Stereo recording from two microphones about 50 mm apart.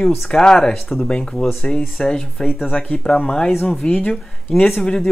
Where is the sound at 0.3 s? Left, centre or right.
Centre.